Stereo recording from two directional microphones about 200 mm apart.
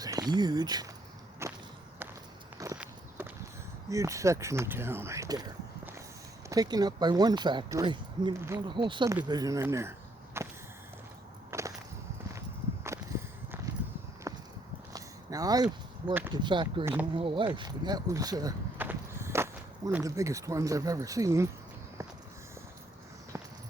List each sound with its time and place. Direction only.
0.0 s speech: 20° right (ahead or behind)
1.4 s whip: 15° right (ahead or behind)
2.7 s walk: 5° right (ahead or behind)
3.8 s speech: 15° right (ahead or behind)
10.4 s a sound: 10° right (ahead or behind)
11.5 s a sound: 15° right (ahead or behind)
12.8 s walk: 15° right (ahead or behind)
14.9 s a sound: 15° right (ahead or behind)
16.3 s speech: 20° right (ahead or behind)